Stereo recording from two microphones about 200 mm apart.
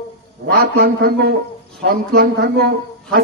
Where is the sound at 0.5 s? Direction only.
50° right (ahead or behind).